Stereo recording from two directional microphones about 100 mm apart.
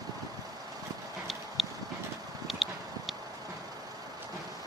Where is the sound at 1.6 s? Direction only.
Centre (ahead or behind).